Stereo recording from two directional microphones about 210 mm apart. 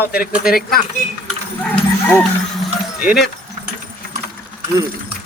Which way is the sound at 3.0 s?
Centre (ahead or behind).